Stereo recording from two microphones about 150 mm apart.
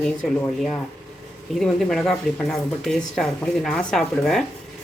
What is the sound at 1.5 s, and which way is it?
Speech, centre (ahead or behind).